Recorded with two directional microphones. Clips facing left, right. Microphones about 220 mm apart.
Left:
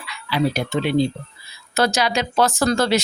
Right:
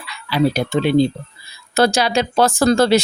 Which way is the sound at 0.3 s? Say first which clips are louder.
Right 4 dB; 35° right (ahead or behind).